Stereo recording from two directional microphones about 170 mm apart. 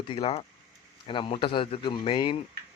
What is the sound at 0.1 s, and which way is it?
A man's voice, 35° left (ahead or behind).